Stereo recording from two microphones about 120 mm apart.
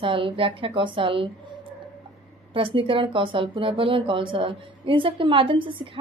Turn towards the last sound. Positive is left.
turn(degrees=-45)  # may be behind; listen again after turning